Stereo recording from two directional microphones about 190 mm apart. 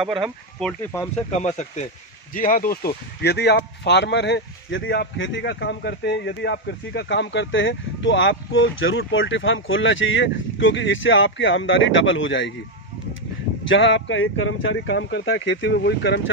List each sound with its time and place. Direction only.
0.6 s speech: 5° left (ahead or behind)
1.4 s speech: 40° left (ahead or behind)
3.2 s speech: 60° left (ahead or behind); by 12.5 s 80° left
13.7 s speech: 75° left (ahead or behind)